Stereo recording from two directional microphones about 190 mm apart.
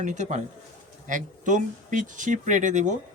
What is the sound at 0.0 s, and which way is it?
Speech, 40° right (ahead or behind).